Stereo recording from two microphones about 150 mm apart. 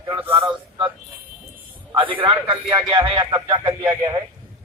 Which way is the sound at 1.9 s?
35° right (ahead or behind).